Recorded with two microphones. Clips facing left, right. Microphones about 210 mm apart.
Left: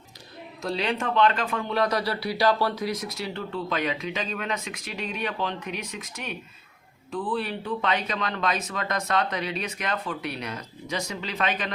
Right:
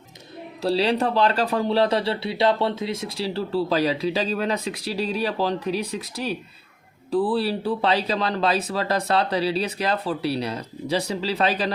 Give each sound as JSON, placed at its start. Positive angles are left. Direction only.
{"t": 0.6, "sound": "speech", "side_deg": -35}